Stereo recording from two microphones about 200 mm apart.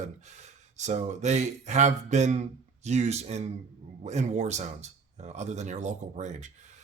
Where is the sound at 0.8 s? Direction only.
35° right (ahead or behind).